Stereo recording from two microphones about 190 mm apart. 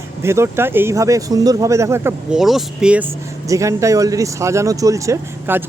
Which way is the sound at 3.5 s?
15° right (ahead or behind).